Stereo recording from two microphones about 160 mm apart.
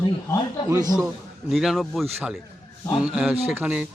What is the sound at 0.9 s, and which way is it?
Speech, centre (ahead or behind).